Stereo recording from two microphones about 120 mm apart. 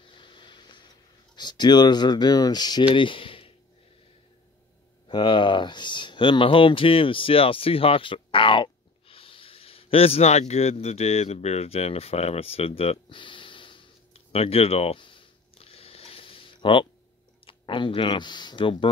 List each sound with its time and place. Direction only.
0.1 s a sound: 40° left (ahead or behind)
2.9 s speech: 45° left (ahead or behind)
5.0 s speech: 40° left (ahead or behind)